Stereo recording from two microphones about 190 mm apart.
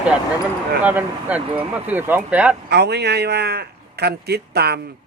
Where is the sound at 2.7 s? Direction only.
60° right (ahead or behind).